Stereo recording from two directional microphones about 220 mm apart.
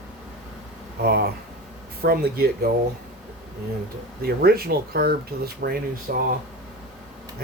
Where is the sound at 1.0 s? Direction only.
45° right (ahead or behind).